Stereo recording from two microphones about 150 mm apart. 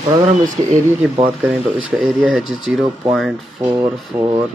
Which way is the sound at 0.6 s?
45° right (ahead or behind).